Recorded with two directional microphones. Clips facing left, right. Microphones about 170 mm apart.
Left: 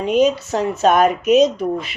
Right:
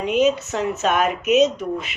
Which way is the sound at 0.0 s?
35° left (ahead or behind).